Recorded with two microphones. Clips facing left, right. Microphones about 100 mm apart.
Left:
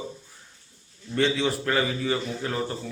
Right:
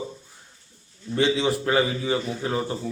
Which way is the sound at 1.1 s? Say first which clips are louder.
Right 2 dB; 15° right (ahead or behind).